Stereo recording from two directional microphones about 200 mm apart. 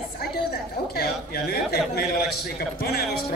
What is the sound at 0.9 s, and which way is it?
A man's voice, 50° left (ahead or behind).